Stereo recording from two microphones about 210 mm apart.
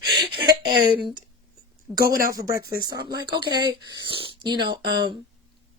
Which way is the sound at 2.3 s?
15° right (ahead or behind).